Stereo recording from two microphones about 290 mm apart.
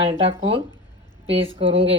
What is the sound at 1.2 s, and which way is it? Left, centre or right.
Speech, centre.